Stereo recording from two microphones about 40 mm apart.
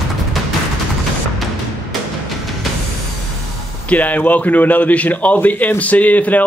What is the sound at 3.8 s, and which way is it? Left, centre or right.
A man's voice, left.